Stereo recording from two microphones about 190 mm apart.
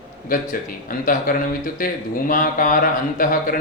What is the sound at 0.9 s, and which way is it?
Speech, 50° left (ahead or behind).